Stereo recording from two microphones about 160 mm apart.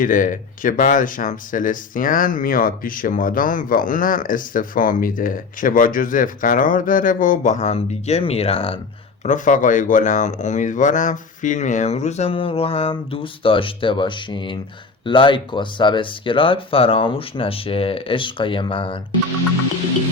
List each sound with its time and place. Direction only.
0.0 s speech: 55° left (ahead or behind); by 8.8 s 35° left (ahead or behind)
9.2 s speech: 55° left (ahead or behind); by 18.9 s 35° left (ahead or behind)